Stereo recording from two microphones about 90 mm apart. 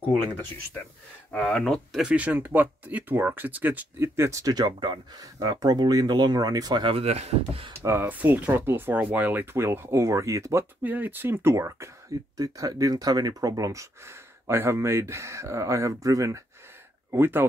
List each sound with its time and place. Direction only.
1.3 s speech: 15° left (ahead or behind)
1.6 s speech: centre (ahead or behind)
2.0 s speech: 15° right (ahead or behind); by 6.8 s 45° right (ahead or behind)
6.8 s speech: 90° right
7.8 s speech: 25° right (ahead or behind)
10.8 s speech: 20° right (ahead or behind)
12.4 s speech: 40° right (ahead or behind)
17.1 s speech: 25° right (ahead or behind)